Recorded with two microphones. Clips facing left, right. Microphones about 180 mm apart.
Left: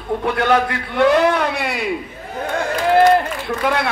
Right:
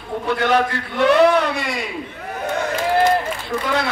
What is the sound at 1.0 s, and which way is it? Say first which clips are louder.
Speech: right 1 dB; 70° right (ahead or behind).